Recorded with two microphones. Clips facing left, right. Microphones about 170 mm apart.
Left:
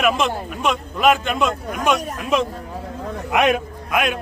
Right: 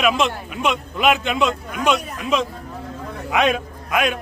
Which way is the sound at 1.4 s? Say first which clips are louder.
Even; 45° left (ahead or behind).